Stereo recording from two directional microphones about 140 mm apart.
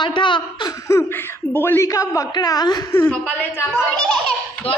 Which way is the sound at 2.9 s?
10° left (ahead or behind).